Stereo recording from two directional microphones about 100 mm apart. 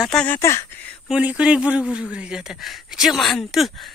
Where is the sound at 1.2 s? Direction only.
15° right (ahead or behind).